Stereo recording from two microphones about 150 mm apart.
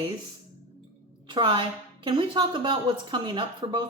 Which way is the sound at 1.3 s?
35° right (ahead or behind).